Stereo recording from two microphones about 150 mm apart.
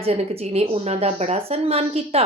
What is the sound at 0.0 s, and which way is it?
Speech, 45° right (ahead or behind).